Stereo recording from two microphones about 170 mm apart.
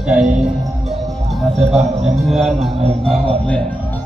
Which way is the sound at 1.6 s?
Centre (ahead or behind).